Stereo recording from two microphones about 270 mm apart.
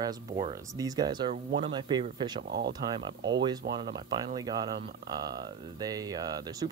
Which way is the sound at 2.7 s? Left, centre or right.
Centre.